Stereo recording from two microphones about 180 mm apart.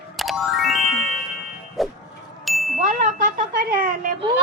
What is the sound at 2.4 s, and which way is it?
Ding, centre (ahead or behind).